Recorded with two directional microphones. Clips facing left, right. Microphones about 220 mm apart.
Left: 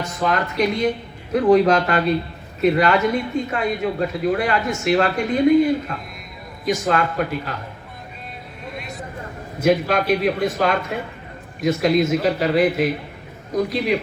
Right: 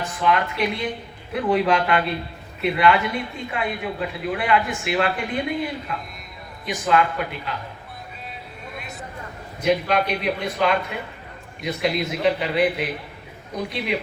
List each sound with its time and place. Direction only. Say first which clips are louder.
0.0 s a man's voice: even; 40° left (ahead or behind)
8.7 s a sound: left 4 dB; centre (ahead or behind)
9.6 s a man's voice: left 3 dB; 45° left (ahead or behind)